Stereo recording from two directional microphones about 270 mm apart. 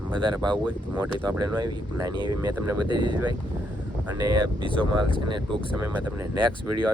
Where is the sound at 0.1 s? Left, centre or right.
Centre.